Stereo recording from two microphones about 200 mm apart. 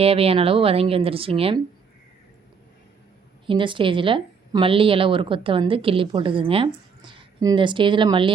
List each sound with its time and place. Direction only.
0.0 s speech: 30° right (ahead or behind)
3.4 s speech: 25° right (ahead or behind)